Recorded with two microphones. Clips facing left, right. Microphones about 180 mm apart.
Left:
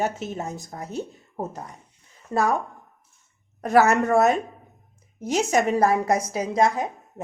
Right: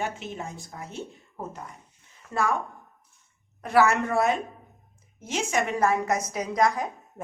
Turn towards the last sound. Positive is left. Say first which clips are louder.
# left 3 dB
turn(degrees=25)  # may be behind; listen again after turning